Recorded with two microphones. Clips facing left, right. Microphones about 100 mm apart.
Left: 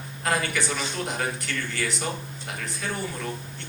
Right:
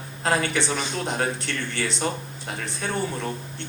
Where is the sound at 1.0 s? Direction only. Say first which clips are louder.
Right 5 dB; 30° right (ahead or behind).